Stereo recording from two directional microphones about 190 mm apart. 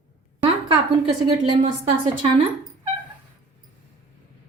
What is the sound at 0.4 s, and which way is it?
A woman's voice, 25° right (ahead or behind).